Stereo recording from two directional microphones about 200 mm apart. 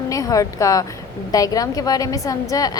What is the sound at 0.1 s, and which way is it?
A woman's voice, 15° left (ahead or behind).